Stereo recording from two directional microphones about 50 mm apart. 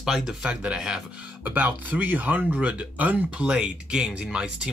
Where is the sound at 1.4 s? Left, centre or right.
Right.